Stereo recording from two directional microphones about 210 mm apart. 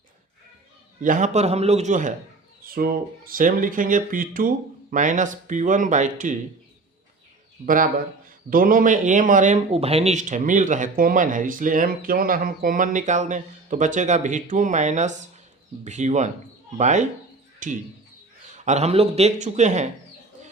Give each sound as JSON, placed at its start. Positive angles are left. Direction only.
{"t": 1.0, "sound": "speech", "side_deg": -35}
{"t": 7.6, "sound": "speech", "side_deg": -40}